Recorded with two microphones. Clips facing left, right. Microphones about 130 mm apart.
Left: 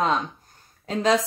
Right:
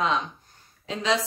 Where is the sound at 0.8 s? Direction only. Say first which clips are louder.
Left 5 dB; 45° left (ahead or behind).